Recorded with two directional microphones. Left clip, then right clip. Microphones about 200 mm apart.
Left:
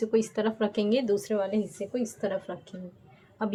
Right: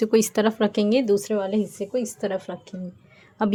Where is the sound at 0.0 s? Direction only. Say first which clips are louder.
Right 7 dB; 60° right (ahead or behind).